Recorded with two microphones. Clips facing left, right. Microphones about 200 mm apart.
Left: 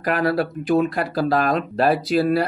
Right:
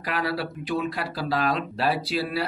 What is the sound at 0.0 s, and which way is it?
Speech, 50° left (ahead or behind).